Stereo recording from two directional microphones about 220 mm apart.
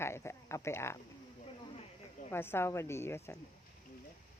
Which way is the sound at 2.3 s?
10° left (ahead or behind).